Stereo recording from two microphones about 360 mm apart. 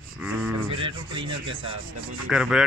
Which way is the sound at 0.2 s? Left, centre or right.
Centre.